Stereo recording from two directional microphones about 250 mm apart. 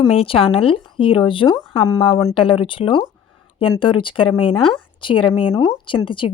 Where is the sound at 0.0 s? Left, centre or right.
Left.